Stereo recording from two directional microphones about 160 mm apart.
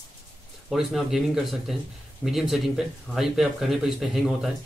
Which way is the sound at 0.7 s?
Centre (ahead or behind).